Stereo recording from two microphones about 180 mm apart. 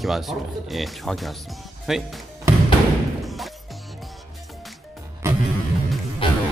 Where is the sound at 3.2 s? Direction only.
Centre (ahead or behind).